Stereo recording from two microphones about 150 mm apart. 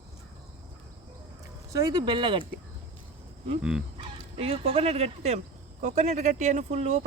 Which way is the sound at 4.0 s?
40° right (ahead or behind).